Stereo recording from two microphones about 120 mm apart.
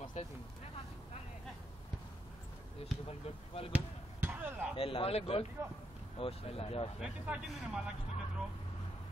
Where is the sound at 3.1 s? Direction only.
55° left (ahead or behind).